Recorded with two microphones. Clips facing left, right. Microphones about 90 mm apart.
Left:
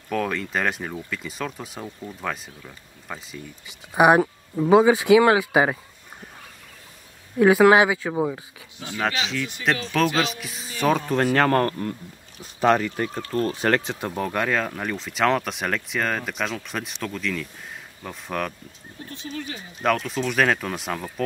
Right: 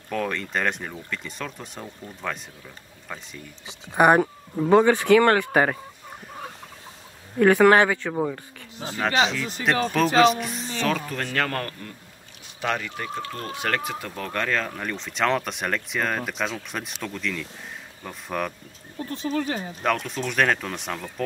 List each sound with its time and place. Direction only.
0.1 s speech: centre (ahead or behind)
7.3 s speech: 5° left (ahead or behind)
8.7 s speech: 35° right (ahead or behind)
9.7 s speech: centre (ahead or behind)
10.8 s speech: 20° left (ahead or behind)
11.3 s speech: 35° left (ahead or behind)
14.1 s speech: 10° left (ahead or behind)
18.9 s speech: 40° right (ahead or behind)
19.8 s speech: centre (ahead or behind)